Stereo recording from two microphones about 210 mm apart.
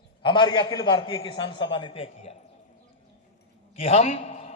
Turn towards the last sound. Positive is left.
turn(degrees=30)  # may be behind; listen again after turning